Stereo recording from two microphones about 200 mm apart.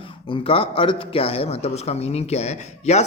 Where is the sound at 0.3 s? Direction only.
25° left (ahead or behind).